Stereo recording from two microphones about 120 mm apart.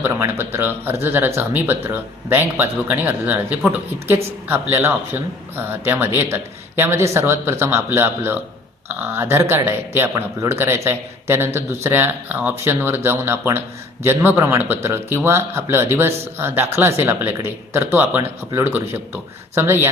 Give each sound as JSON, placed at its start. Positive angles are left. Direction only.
{"t": 0.0, "sound": "a man's voice", "side_deg": -20}